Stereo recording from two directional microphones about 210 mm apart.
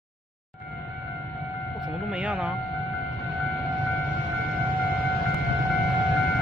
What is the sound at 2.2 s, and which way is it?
Speech, 5° right (ahead or behind).